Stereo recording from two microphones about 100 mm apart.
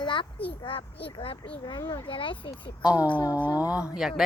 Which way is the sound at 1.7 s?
45° left (ahead or behind).